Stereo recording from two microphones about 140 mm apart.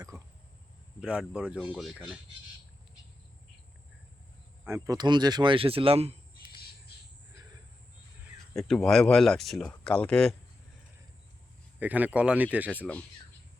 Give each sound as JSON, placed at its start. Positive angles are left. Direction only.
{"t": 0.1, "sound": "a sound", "side_deg": -20}
{"t": 1.0, "sound": "speech", "side_deg": -5}
{"t": 4.6, "sound": "speech", "side_deg": -20}
{"t": 4.9, "sound": "speech", "side_deg": -30}
{"t": 8.5, "sound": "speech", "side_deg": 5}
{"t": 11.8, "sound": "speech", "side_deg": -10}